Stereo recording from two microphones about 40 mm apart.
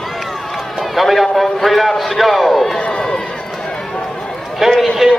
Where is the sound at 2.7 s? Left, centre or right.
Left.